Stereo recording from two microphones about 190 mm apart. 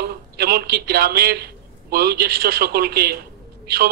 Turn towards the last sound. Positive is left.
turn(degrees=-55)  # may be behind; listen again after turning